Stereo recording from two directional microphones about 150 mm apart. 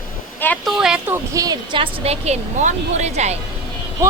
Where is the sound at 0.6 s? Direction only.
5° right (ahead or behind); by 3.3 s 50° right (ahead or behind).